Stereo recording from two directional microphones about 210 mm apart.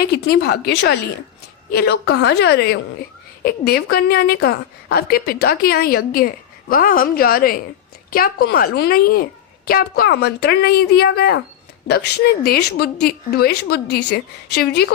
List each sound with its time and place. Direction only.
0.1 s a woman's voice: 50° left (ahead or behind)